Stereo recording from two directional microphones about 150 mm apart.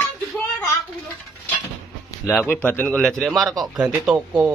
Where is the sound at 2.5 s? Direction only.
10° left (ahead or behind); by 4.5 s 10° right (ahead or behind).